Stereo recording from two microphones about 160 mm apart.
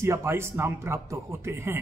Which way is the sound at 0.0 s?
15° right (ahead or behind).